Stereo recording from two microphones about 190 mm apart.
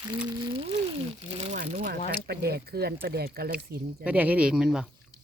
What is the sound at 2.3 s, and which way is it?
Speech, 55° right (ahead or behind).